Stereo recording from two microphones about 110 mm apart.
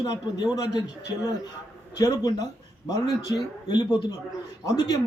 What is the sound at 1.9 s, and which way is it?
A man's voice, 30° left (ahead or behind).